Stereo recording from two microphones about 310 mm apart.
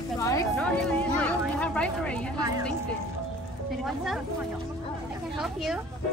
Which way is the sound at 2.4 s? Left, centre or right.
Centre.